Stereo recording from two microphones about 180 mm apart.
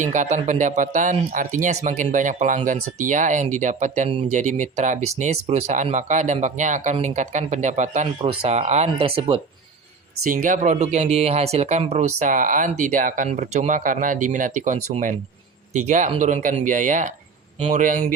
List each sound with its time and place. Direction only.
0.0 s speech: 45° right (ahead or behind)
10.2 s speech: 50° right (ahead or behind)